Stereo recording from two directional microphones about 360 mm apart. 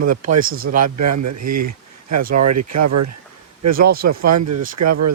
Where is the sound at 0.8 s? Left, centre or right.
Right.